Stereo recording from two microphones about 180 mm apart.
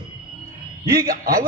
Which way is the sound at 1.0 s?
55° right (ahead or behind).